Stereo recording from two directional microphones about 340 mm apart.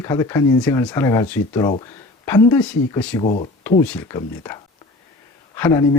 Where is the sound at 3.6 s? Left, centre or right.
Centre.